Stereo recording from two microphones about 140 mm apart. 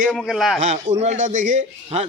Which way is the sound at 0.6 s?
55° right (ahead or behind).